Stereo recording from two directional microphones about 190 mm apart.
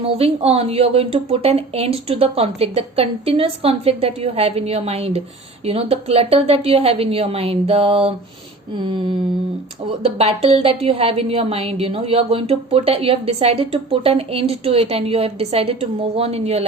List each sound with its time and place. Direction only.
0.0 s a woman's voice: 30° right (ahead or behind)
10.0 s a woman's voice: 30° right (ahead or behind)